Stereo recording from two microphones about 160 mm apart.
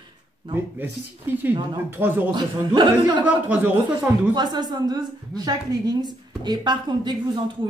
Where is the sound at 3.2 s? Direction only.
10° right (ahead or behind).